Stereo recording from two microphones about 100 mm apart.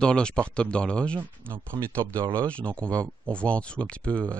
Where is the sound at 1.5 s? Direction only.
25° right (ahead or behind).